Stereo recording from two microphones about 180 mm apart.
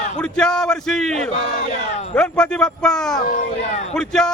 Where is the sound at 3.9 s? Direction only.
5° left (ahead or behind).